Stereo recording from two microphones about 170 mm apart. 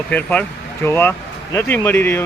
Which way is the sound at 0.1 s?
10° left (ahead or behind).